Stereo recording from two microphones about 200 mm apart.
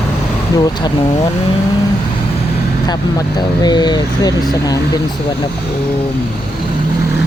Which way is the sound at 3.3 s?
20° left (ahead or behind).